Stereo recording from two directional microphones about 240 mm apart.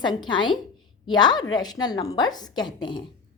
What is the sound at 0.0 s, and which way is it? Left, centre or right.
A woman's voice, centre.